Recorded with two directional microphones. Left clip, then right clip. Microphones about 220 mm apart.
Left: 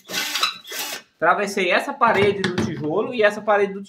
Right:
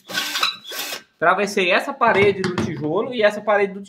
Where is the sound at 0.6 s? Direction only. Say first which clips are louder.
Right 1 dB; 30° right (ahead or behind).